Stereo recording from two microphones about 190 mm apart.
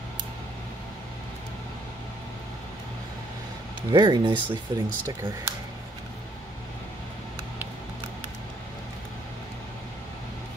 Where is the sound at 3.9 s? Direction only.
25° right (ahead or behind).